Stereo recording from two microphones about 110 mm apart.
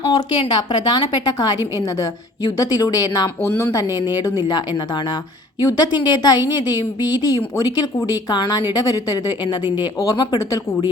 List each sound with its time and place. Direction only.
0.1 s a woman's voice: 40° left (ahead or behind)
3.2 s speech: 25° left (ahead or behind)
3.7 s a woman's voice: 35° left (ahead or behind)